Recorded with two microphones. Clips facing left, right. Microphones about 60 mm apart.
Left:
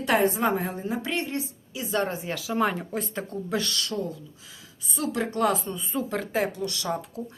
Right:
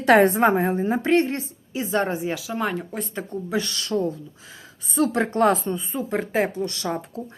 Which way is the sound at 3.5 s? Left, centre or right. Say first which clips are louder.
Right 5 dB; right.